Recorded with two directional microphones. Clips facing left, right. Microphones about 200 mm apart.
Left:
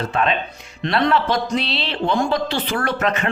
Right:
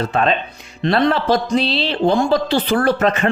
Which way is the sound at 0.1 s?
35° right (ahead or behind).